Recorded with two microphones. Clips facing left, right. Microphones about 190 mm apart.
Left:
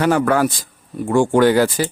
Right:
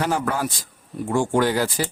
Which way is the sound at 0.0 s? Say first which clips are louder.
Left 8 dB; 70° left (ahead or behind).